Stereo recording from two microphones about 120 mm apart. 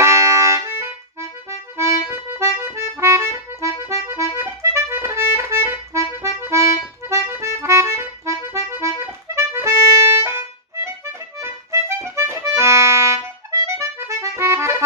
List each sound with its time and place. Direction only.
0.0 s music: 25° right (ahead or behind)
1.8 s accordion: 20° right (ahead or behind)